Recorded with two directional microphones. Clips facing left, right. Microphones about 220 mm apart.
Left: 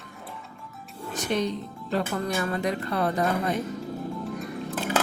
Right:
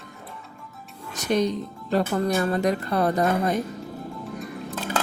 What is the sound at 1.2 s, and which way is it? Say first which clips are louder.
Speech: right 4 dB; 40° right (ahead or behind).